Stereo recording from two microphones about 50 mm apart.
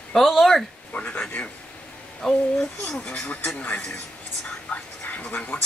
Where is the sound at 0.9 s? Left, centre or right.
Left.